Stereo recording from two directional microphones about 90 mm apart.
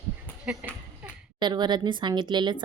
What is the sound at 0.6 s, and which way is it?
Speech, 15° right (ahead or behind).